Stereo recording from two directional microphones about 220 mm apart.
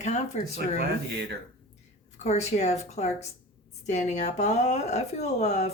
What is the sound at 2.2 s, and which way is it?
Speech, 30° left (ahead or behind).